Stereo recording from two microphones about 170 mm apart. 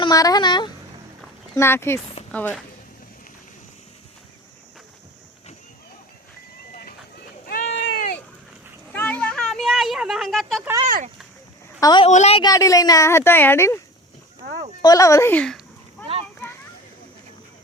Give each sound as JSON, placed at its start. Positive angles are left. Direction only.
{"t": 0.0, "sound": "speech", "side_deg": 20}
{"t": 1.5, "sound": "speech", "side_deg": 15}
{"t": 7.6, "sound": "a sound", "side_deg": 40}
{"t": 8.9, "sound": "a sound", "side_deg": 10}
{"t": 10.8, "sound": "speech", "side_deg": -50}
{"t": 11.8, "sound": "a woman's voice", "side_deg": 25}
{"t": 12.0, "sound": "a woman's voice", "side_deg": 40}
{"t": 12.4, "sound": "speech", "side_deg": 20}
{"t": 14.8, "sound": "speech", "side_deg": 20}